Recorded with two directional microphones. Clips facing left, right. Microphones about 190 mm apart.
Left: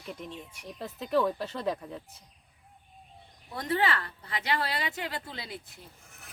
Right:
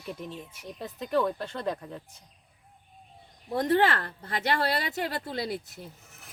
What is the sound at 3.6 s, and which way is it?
Speech, 50° right (ahead or behind).